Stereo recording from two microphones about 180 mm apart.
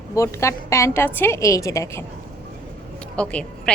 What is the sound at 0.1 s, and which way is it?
A woman's voice, 15° left (ahead or behind).